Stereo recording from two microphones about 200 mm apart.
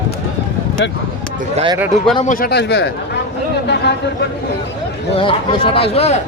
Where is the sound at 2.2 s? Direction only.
45° left (ahead or behind).